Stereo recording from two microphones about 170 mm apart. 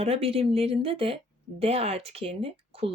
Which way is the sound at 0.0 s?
35° right (ahead or behind).